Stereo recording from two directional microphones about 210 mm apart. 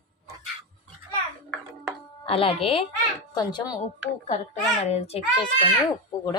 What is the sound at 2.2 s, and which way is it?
Speech, 25° left (ahead or behind).